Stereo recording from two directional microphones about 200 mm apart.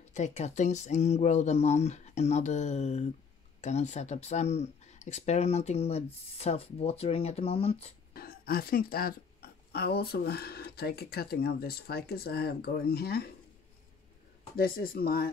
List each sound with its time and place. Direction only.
0.1 s speech: 35° left (ahead or behind)
8.1 s speech: 50° left (ahead or behind)
14.6 s speech: 50° left (ahead or behind)